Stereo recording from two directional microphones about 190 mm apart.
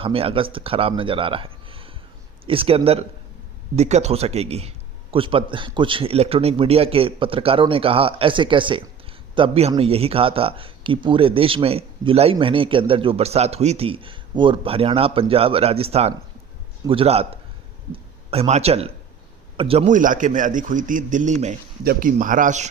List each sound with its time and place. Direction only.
0.0 s a man's voice: 30° right (ahead or behind)
19.9 s speech: 45° right (ahead or behind)